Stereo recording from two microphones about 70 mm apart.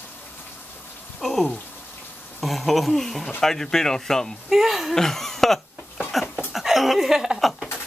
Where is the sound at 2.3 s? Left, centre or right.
Centre.